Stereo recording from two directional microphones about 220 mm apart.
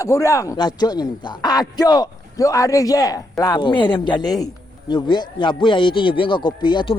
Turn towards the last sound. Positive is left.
turn(degrees=20)  # may be behind; listen again after turning